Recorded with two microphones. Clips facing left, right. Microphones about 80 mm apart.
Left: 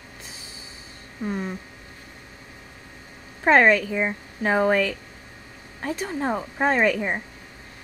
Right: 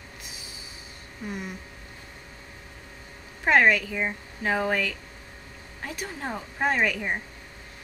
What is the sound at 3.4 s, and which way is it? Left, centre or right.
A woman's voice, left.